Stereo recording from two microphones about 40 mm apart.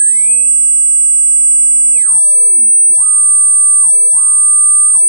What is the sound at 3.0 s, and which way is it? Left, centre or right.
Music, left.